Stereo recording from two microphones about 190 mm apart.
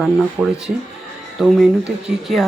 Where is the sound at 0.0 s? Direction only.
Centre (ahead or behind).